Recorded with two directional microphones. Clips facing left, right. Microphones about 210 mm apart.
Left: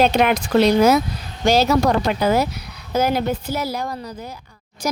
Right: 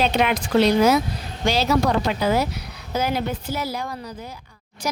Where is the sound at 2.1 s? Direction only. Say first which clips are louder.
Left 3 dB; 50° left (ahead or behind).